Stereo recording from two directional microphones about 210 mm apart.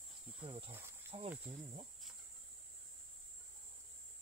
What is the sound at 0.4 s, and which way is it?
Speech, 25° right (ahead or behind).